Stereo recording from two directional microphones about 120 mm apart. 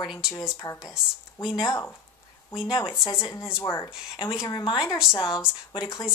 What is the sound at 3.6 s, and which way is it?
Speech, 20° left (ahead or behind).